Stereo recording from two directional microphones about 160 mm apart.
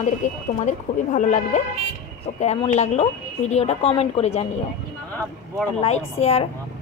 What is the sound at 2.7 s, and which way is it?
A woman's voice, 45° left (ahead or behind).